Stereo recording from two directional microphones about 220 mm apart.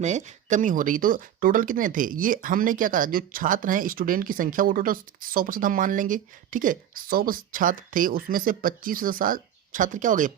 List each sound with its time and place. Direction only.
0.0 s speech: 30° right (ahead or behind)